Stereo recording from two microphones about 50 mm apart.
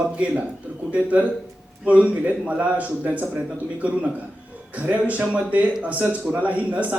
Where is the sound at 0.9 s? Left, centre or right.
Right.